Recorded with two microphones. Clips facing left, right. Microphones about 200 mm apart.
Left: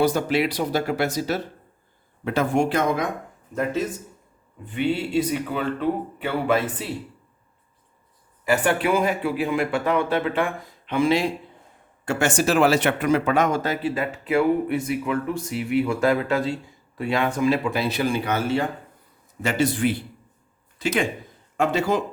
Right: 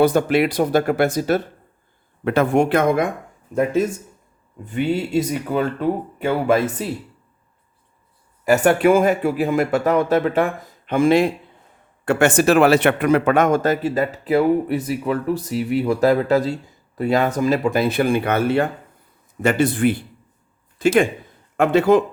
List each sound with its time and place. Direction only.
0.0 s speech: 55° right (ahead or behind)
4.6 s speech: 45° right (ahead or behind)
8.4 s speech: 45° right (ahead or behind)